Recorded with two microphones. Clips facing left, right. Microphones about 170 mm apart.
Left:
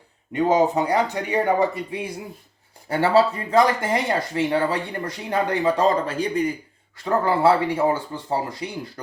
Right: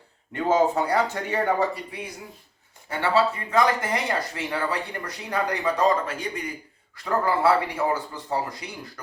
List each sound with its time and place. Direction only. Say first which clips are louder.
0.3 s speech: left 3 dB; 15° left (ahead or behind)
3.0 s speech: left 4 dB; 35° left (ahead or behind)